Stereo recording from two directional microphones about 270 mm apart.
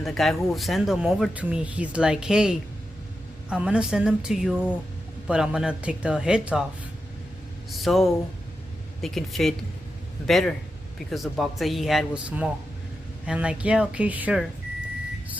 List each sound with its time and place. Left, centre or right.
0.0 s speech: centre
7.7 s speech: centre